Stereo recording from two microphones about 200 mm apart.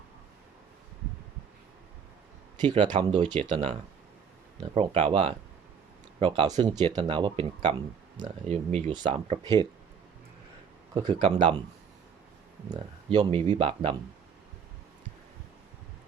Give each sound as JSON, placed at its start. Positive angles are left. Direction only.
{"t": 2.6, "sound": "speech", "side_deg": -20}
{"t": 11.0, "sound": "speech", "side_deg": -30}
{"t": 12.6, "sound": "speech", "side_deg": -20}